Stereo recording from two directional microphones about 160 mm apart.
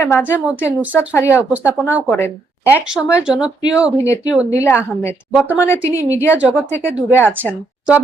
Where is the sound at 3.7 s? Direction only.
5° right (ahead or behind).